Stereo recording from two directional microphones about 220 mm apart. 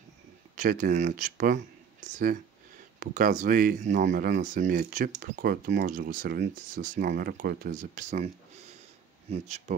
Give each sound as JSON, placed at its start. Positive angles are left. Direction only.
{"t": 0.6, "sound": "speech", "side_deg": -35}